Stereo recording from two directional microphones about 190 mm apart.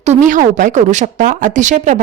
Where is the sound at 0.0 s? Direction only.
40° right (ahead or behind).